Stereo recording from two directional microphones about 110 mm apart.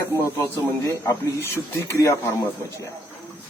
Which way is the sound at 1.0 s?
25° left (ahead or behind).